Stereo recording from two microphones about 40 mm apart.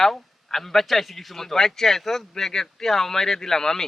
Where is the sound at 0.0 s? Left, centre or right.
Centre.